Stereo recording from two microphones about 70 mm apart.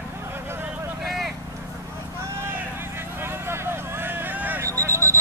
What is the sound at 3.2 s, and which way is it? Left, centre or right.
Vehicle, right.